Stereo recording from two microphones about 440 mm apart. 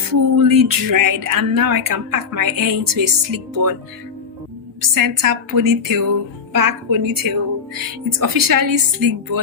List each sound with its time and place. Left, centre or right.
0.3 s speech: right
4.8 s speech: right